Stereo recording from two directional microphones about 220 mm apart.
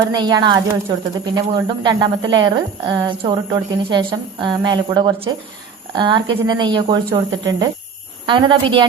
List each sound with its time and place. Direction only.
0.2 s speech: 20° right (ahead or behind)